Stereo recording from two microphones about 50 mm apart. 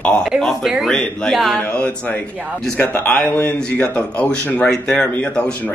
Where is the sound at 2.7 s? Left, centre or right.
Left.